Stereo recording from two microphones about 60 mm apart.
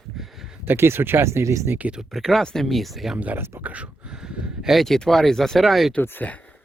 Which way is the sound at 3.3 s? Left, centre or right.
Right.